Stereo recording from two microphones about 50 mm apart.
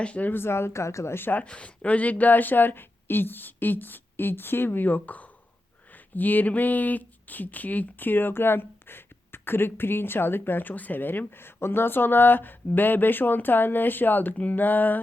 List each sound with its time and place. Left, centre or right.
0.0 s speech: left
0.3 s speech: left
1.1 s speech: left
1.5 s speech: left